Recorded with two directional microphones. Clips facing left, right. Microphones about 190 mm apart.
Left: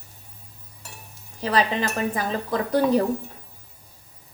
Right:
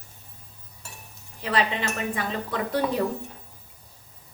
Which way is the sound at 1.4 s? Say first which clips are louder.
Left 3 dB; 35° left (ahead or behind).